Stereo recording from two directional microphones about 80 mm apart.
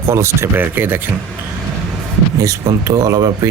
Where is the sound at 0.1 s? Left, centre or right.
Right.